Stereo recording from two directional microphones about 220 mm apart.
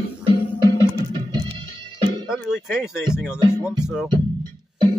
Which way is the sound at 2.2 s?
Centre (ahead or behind).